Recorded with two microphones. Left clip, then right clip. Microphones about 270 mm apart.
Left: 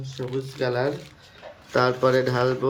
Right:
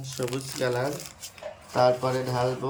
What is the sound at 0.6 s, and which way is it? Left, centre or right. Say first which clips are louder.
Speech: left 2 dB; centre.